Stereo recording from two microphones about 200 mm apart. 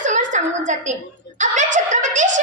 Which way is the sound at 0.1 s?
40° right (ahead or behind).